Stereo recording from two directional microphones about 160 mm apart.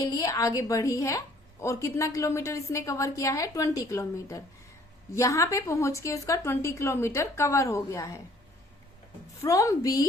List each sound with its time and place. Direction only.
0.1 s a woman's voice: 20° left (ahead or behind)
9.4 s a woman's voice: 20° left (ahead or behind)